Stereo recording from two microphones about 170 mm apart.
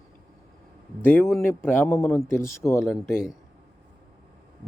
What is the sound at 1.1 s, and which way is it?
Speech, 10° left (ahead or behind).